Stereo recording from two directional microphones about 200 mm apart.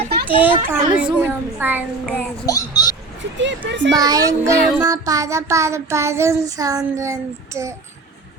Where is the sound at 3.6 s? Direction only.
65° right (ahead or behind).